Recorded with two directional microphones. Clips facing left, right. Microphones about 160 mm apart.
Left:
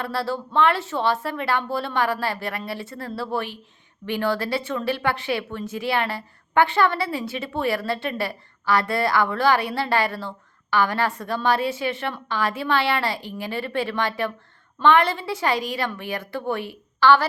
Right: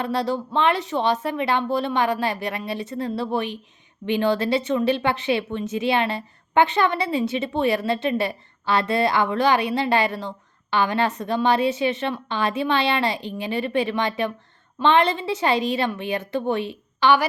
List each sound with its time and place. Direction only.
0.0 s speech: 20° right (ahead or behind)